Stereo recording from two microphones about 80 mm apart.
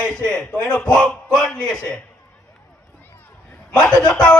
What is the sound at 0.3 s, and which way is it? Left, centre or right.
A man's voice, centre.